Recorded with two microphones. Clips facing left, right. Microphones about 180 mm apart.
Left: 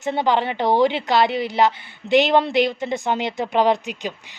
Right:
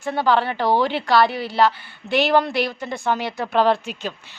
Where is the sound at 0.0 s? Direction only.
20° left (ahead or behind).